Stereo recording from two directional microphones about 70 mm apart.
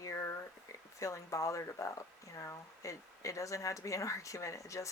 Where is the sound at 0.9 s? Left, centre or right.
Left.